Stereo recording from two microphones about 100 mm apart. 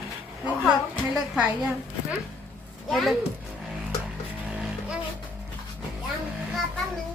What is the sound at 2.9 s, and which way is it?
Speech, centre (ahead or behind).